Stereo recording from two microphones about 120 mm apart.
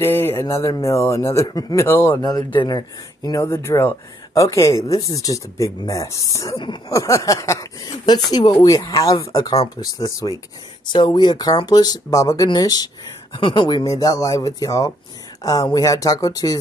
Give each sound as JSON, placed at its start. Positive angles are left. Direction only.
{"t": 0.0, "sound": "speech", "side_deg": 20}
{"t": 1.9, "sound": "speech", "side_deg": 20}
{"t": 2.2, "sound": "speech", "side_deg": 40}
{"t": 10.9, "sound": "speech", "side_deg": 40}
{"t": 13.8, "sound": "speech", "side_deg": 30}